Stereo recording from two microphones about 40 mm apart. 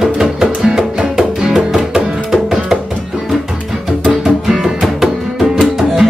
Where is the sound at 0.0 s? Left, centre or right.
Centre.